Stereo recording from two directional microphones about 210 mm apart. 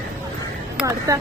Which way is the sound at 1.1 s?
15° right (ahead or behind).